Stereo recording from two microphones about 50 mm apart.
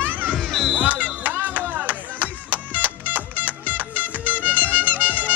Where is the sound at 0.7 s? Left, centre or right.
Right.